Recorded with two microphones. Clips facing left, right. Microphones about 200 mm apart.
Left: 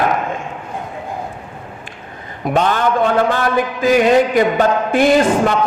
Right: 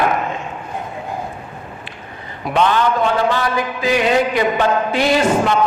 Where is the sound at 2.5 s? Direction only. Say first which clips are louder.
Even; 45° left (ahead or behind).